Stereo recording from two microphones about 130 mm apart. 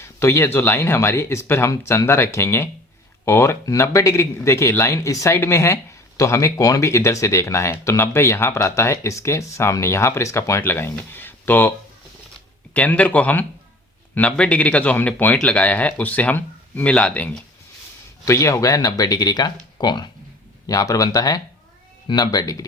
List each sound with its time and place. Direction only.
0.0 s speech: 20° left (ahead or behind)
12.7 s speech: 10° left (ahead or behind)
18.3 s speech: 25° left (ahead or behind)